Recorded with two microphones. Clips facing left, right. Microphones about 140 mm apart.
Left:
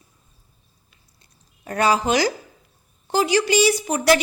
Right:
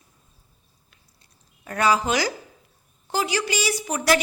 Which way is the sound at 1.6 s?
30° left (ahead or behind).